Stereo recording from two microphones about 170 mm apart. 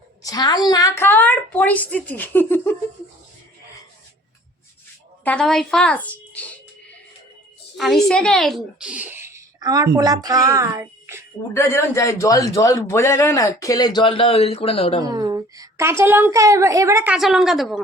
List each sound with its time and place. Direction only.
0.2 s a woman's voice: 20° left (ahead or behind)
5.2 s a woman's voice: 5° left (ahead or behind)
7.8 s speech: centre (ahead or behind); by 11.2 s 15° right (ahead or behind)
11.5 s a man's voice: 15° left (ahead or behind); by 15.0 s 35° left (ahead or behind)
15.0 s a woman's voice: 25° right (ahead or behind); by 17.7 s centre (ahead or behind)